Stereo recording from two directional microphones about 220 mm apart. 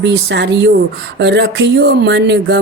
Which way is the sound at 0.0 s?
50° right (ahead or behind).